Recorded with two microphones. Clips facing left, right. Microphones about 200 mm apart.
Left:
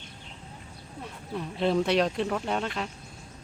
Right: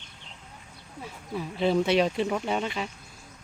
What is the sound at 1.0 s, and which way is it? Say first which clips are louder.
Speech: right 1 dB; centre (ahead or behind).